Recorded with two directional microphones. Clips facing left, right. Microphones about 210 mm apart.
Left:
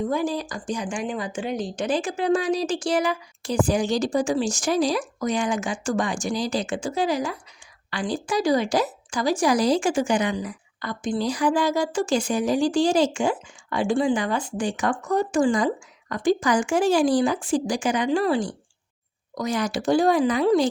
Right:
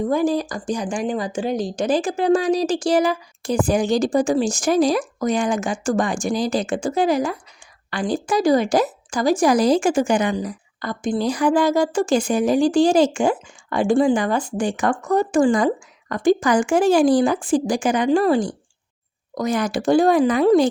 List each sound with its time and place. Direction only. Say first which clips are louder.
0.1 s a woman's voice: right 6 dB; 45° right (ahead or behind)